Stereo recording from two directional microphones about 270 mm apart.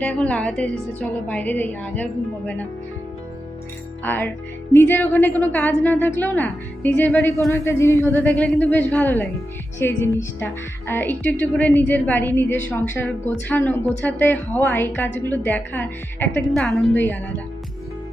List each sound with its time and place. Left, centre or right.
0.0 s a woman's voice: centre
4.0 s a woman's voice: centre